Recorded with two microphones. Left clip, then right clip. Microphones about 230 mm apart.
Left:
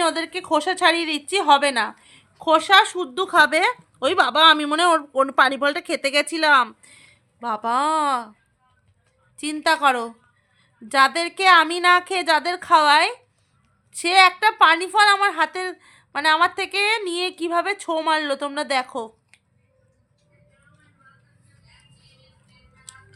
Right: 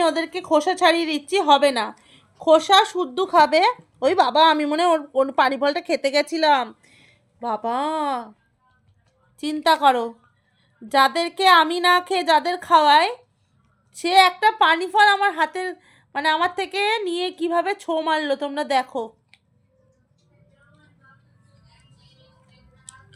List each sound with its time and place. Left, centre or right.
0.0 s a woman's voice: centre
9.4 s a woman's voice: centre